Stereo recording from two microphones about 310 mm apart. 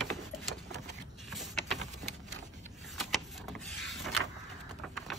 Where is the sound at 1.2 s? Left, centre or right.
Centre.